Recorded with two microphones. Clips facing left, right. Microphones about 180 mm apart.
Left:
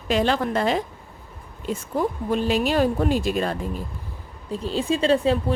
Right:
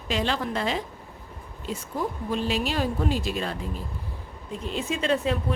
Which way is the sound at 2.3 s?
50° left (ahead or behind).